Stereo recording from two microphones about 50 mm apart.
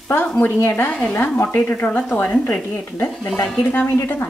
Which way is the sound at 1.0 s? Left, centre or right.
Left.